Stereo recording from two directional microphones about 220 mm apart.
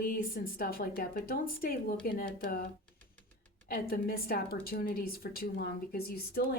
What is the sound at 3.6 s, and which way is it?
A woman's voice, 40° left (ahead or behind).